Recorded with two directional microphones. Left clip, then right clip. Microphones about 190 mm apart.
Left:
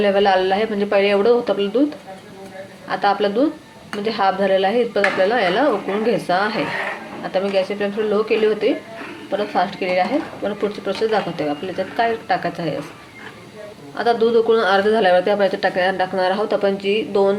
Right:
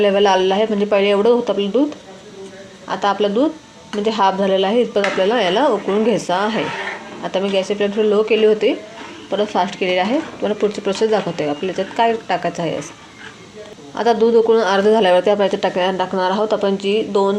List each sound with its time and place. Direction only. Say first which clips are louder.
0.0 s speech: right 2 dB; 35° right (ahead or behind)
2.9 s speech: right 1 dB; 30° right (ahead or behind)
13.9 s a man's voice: right 2 dB; 40° right (ahead or behind); by 17.3 s 25° right (ahead or behind)